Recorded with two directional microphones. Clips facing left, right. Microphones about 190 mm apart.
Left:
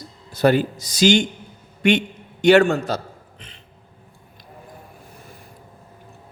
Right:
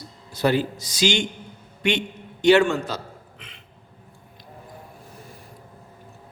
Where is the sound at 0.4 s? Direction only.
50° left (ahead or behind).